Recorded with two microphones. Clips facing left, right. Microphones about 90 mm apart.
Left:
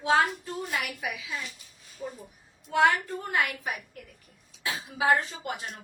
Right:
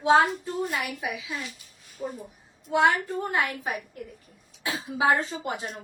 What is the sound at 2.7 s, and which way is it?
A woman's voice, 20° right (ahead or behind).